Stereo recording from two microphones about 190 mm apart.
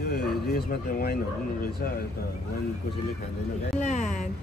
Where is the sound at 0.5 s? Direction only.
50° left (ahead or behind).